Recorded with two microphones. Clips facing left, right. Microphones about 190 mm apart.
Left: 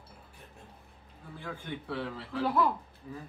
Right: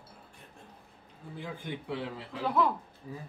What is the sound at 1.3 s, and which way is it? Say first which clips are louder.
A man's voice: right 1 dB; 15° right (ahead or behind).